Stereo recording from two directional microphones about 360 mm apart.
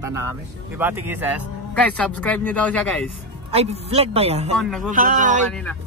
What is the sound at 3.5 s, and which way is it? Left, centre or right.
Speech, centre.